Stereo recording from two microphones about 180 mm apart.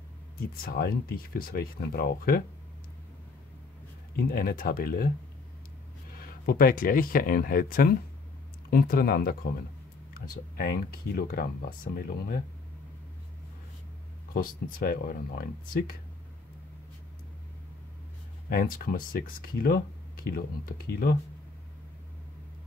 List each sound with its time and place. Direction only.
0.6 s speech: 55° left (ahead or behind)
4.2 s speech: 55° left (ahead or behind)
6.1 s speech: 55° left (ahead or behind)
14.3 s speech: 55° left (ahead or behind)
18.5 s speech: 55° left (ahead or behind)